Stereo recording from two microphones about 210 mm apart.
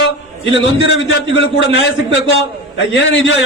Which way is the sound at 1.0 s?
65° left (ahead or behind).